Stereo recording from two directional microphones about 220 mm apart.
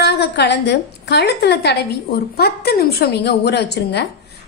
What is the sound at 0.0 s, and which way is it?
A woman's voice, 50° left (ahead or behind).